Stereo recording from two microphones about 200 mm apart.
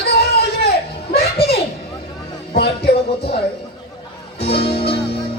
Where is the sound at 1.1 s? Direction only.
50° left (ahead or behind).